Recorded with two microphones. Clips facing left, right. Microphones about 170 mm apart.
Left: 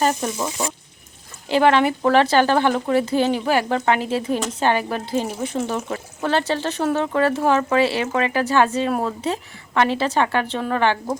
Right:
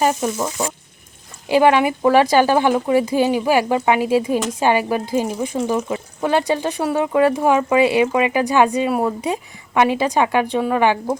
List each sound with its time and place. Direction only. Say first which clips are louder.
0.0 s speech: right 2 dB; 10° right (ahead or behind)
1.5 s speech: right 2 dB; 10° right (ahead or behind)